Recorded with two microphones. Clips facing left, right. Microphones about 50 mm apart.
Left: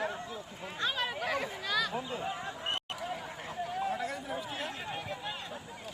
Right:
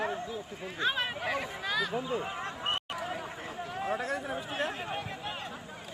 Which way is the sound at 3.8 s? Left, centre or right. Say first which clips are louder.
Right 2 dB; right.